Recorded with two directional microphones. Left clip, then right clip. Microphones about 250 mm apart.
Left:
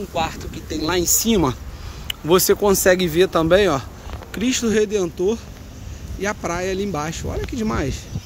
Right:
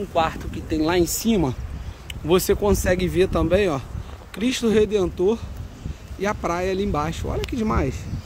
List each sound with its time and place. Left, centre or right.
0.1 s speech: centre